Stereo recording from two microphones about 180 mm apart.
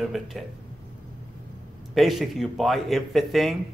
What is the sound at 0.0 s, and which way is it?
Speech, centre (ahead or behind).